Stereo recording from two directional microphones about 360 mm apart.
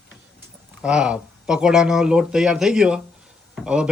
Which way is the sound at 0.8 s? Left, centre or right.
Centre.